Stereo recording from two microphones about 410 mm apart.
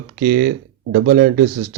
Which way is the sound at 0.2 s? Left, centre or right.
Right.